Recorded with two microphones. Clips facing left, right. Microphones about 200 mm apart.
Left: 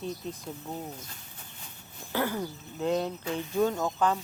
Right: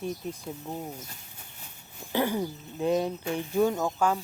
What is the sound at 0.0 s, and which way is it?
Speech, 10° right (ahead or behind).